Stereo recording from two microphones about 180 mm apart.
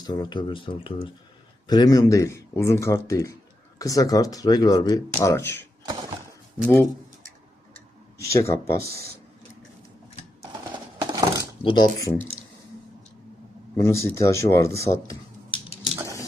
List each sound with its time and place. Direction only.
0.0 s speech: 25° left (ahead or behind)
5.8 s a sound: 20° right (ahead or behind)
8.3 s speech: 15° left (ahead or behind)
10.7 s scissors: 25° right (ahead or behind)
11.6 s speech: 25° left (ahead or behind)
13.7 s speech: 15° left (ahead or behind)
14.8 s a sound: 15° left (ahead or behind)